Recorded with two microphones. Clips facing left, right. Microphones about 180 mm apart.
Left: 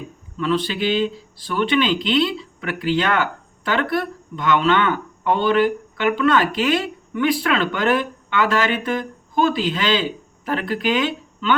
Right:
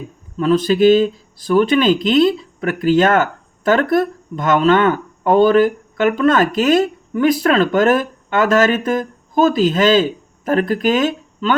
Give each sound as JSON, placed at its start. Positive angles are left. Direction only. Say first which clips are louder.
{"t": 0.3, "sound": "speech", "louder": "right 8 dB", "side_deg": -45}